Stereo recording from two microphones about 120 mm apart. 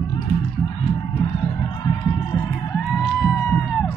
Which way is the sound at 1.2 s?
45° left (ahead or behind).